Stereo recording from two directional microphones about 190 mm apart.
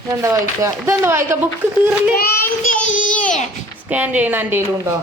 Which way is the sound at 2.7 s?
45° left (ahead or behind).